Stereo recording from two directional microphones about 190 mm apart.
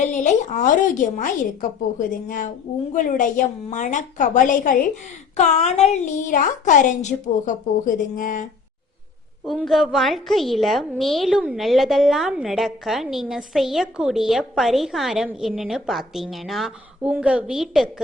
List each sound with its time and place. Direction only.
0.0 s a woman's voice: 40° left (ahead or behind)
9.5 s a woman's voice: centre (ahead or behind)